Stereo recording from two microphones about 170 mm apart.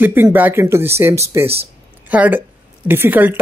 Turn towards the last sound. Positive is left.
turn(degrees=-10)  # may be behind; listen again after turning